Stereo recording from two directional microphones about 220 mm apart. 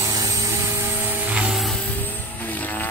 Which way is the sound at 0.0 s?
15° right (ahead or behind).